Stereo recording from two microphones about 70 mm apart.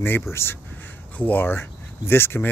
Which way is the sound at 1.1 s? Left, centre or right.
Left.